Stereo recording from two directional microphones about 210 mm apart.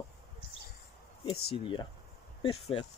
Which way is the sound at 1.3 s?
25° left (ahead or behind).